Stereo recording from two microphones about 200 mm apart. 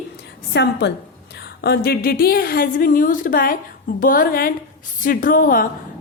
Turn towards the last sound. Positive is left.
turn(degrees=45)  # may be behind; listen again after turning